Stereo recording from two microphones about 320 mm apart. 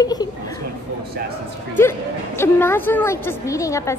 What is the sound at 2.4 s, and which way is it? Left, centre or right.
A woman's voice, centre.